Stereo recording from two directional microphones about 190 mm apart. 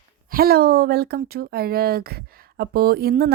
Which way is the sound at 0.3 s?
50° right (ahead or behind).